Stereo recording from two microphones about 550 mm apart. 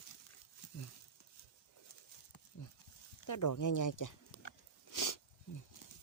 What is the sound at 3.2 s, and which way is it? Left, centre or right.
Speech, left.